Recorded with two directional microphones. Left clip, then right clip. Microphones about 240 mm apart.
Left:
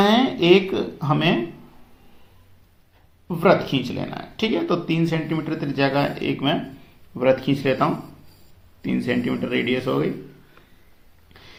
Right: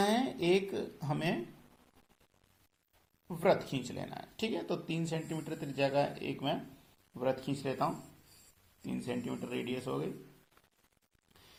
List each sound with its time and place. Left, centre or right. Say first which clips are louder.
0.0 s speech: left 13 dB; right
3.2 s speech: left 12 dB; centre